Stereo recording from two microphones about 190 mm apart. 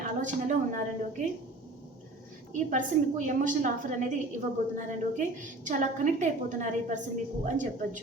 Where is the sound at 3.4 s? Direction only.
40° right (ahead or behind).